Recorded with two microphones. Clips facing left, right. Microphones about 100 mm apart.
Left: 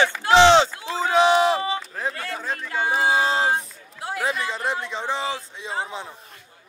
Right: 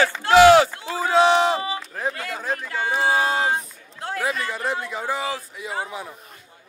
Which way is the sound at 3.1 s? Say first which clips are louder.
Right 1 dB; 25° left (ahead or behind).